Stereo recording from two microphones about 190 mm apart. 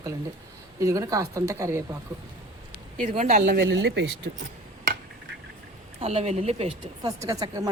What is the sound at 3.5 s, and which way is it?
Speech, 65° right (ahead or behind).